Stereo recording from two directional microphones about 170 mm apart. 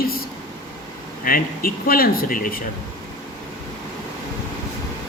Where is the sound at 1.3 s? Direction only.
60° left (ahead or behind).